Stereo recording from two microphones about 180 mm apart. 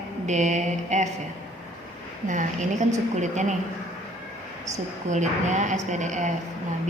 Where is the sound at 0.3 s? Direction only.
40° right (ahead or behind).